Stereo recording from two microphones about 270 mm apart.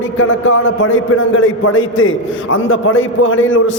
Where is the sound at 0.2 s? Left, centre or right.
Left.